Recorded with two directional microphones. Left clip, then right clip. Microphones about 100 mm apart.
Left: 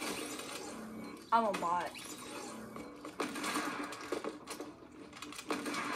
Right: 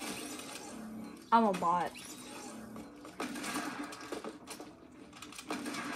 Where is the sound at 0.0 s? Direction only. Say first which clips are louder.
Left 2 dB; 25° left (ahead or behind).